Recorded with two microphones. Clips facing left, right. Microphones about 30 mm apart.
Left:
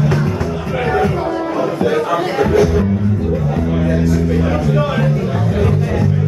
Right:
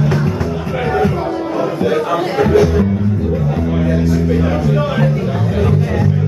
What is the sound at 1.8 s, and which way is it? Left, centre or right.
Speech, centre.